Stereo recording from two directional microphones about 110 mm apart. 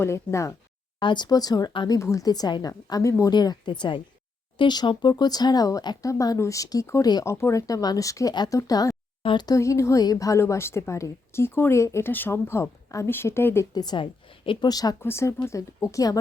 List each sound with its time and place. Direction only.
0.0 s a woman's voice: 25° left (ahead or behind)
0.9 s speech: 45° left (ahead or behind)
1.9 s speech: 30° left (ahead or behind)
3.3 s a woman's voice: 40° left (ahead or behind)
9.2 s a woman's voice: 50° left (ahead or behind)
9.5 s a woman's voice: 30° left (ahead or behind)
13.7 s a woman's voice: 40° left (ahead or behind)
14.7 s speech: 35° left (ahead or behind)
15.0 s a woman's voice: 25° left (ahead or behind)